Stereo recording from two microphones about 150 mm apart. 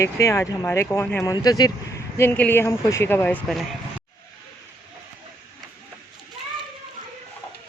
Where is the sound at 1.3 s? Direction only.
25° left (ahead or behind).